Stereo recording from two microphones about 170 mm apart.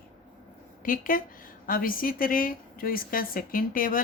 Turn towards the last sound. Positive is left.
turn(degrees=55)  # may be behind; listen again after turning